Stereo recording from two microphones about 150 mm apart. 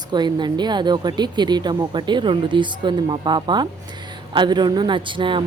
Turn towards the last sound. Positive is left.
turn(degrees=-35)  # may be behind; listen again after turning